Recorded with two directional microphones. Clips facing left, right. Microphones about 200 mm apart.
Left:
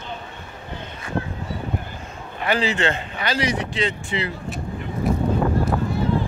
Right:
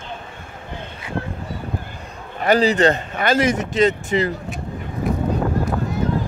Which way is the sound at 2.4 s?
40° right (ahead or behind).